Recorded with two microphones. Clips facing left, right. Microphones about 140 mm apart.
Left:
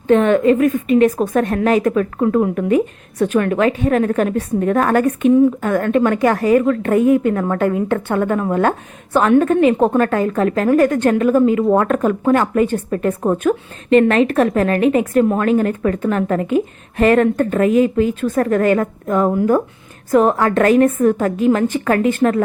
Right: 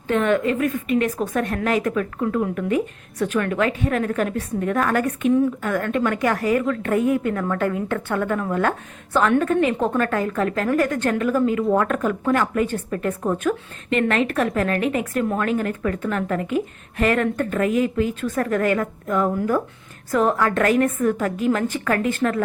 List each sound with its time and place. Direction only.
0.1 s speech: 30° left (ahead or behind)
1.1 s a woman's voice: 55° left (ahead or behind)
1.5 s speech: 30° left (ahead or behind)
1.9 s a woman's voice: 40° left (ahead or behind)
20.1 s speech: 25° left (ahead or behind)